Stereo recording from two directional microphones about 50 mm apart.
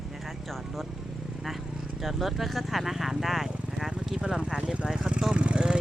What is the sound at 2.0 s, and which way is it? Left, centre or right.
Speech, centre.